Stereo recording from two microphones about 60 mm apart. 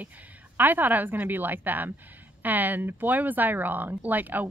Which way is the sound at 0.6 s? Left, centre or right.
Right.